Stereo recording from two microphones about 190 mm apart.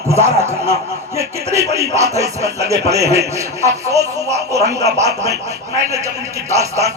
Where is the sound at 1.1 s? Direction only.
35° right (ahead or behind).